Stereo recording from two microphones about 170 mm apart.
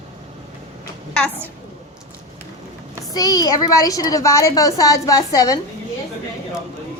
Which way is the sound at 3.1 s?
20° left (ahead or behind).